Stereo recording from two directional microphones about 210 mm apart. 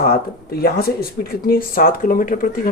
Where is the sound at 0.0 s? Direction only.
45° left (ahead or behind).